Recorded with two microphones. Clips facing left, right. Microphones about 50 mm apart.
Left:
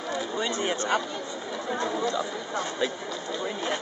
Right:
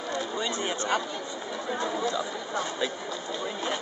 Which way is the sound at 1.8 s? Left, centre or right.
Centre.